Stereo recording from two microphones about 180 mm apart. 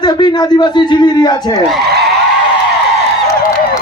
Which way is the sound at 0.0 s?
25° left (ahead or behind).